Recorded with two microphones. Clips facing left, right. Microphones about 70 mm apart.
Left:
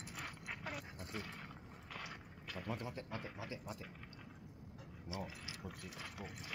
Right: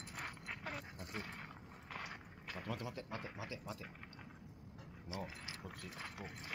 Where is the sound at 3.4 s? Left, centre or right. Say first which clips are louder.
Even; right.